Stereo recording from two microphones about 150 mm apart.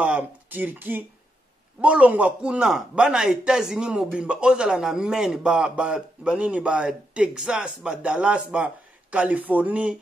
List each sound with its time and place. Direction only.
0.0 s a man's voice: 10° right (ahead or behind)